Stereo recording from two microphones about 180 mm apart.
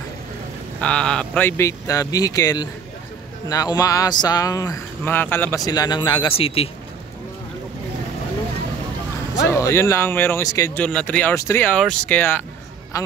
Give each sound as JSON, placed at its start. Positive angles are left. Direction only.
{"t": 0.7, "sound": "speech", "side_deg": 5}
{"t": 5.7, "sound": "speech", "side_deg": 20}
{"t": 9.5, "sound": "speech", "side_deg": 15}
{"t": 10.8, "sound": "a man's voice", "side_deg": 5}